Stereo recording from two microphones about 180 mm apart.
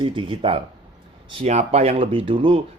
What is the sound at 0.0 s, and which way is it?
Speech, 30° right (ahead or behind).